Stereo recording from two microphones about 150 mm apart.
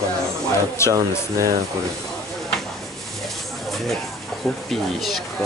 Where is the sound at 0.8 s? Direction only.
20° left (ahead or behind).